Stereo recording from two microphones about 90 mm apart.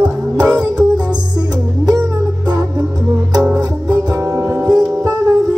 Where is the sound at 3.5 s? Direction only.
45° right (ahead or behind).